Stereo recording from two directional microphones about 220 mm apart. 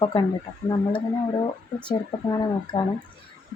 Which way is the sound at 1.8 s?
20° left (ahead or behind).